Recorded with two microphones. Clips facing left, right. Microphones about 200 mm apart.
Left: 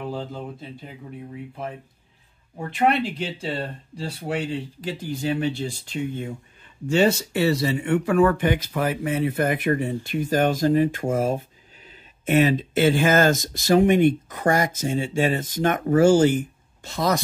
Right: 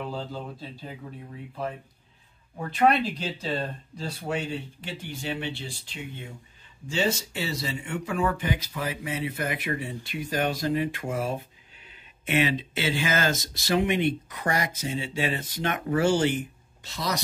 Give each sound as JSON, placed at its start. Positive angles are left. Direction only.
{"t": 2.7, "sound": "speech", "side_deg": 25}
{"t": 6.9, "sound": "speech", "side_deg": 60}